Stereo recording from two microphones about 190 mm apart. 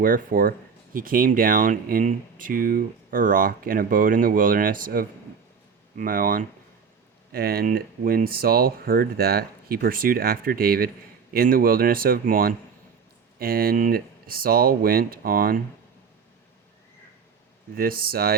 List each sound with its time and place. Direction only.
0.0 s speech: 45° right (ahead or behind)
17.7 s speech: 50° right (ahead or behind)